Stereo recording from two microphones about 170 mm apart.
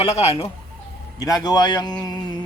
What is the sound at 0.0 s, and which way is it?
Speech, 35° left (ahead or behind).